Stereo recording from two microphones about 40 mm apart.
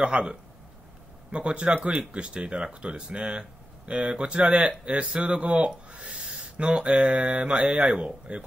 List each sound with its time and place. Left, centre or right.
0.0 s speech: right
6.1 s a sound: right
6.5 s speech: right